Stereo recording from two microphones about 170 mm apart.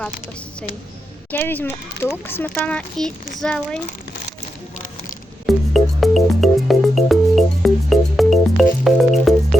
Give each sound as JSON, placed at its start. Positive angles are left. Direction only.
{"t": 1.3, "sound": "speech", "side_deg": 10}
{"t": 5.5, "sound": "music", "side_deg": 0}